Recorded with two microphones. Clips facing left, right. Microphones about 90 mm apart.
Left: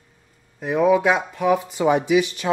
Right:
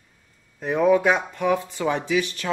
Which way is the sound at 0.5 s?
5° left (ahead or behind).